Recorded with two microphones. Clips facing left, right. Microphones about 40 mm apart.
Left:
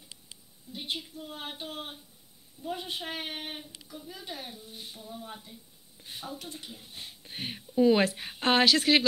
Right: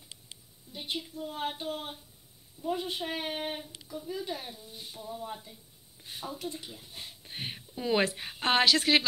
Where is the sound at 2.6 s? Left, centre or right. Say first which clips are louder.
Right 3 dB; centre.